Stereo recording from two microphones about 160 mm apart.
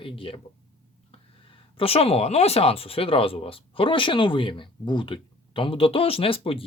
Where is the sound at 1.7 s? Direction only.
35° left (ahead or behind).